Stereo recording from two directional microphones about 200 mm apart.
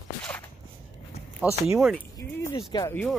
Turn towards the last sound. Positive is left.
turn(degrees=10)  # may be behind; listen again after turning